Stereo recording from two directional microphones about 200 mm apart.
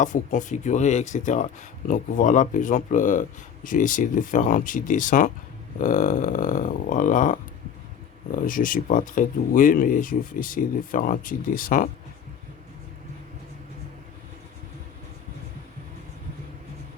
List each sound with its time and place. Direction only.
0.0 s speech: 40° left (ahead or behind)